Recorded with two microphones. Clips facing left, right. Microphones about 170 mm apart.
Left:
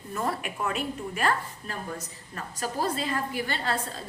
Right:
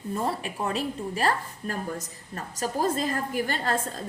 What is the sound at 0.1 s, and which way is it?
A woman's voice, 30° right (ahead or behind).